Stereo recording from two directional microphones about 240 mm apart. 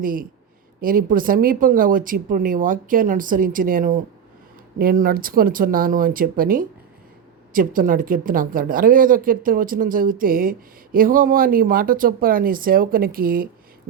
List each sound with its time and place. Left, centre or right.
0.0 s speech: right